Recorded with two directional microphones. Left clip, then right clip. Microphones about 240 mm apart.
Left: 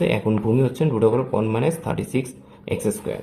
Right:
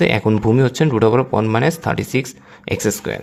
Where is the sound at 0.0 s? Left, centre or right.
Right.